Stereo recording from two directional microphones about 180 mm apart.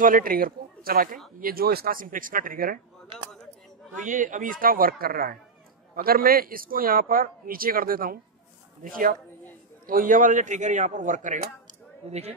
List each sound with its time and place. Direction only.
0.0 s a man's voice: 50° right (ahead or behind)
3.9 s a man's voice: 45° right (ahead or behind)
9.8 s a man's voice: 50° right (ahead or behind)
12.1 s a woman's voice: 35° right (ahead or behind)